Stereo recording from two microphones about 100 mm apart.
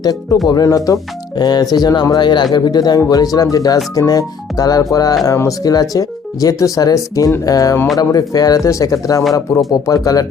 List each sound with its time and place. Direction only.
0.0 s speech: 40° left (ahead or behind)